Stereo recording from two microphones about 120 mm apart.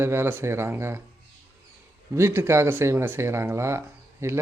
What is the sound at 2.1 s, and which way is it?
A man's voice, 20° right (ahead or behind).